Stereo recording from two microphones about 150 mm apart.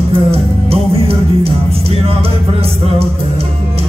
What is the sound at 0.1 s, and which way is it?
Music, 40° right (ahead or behind).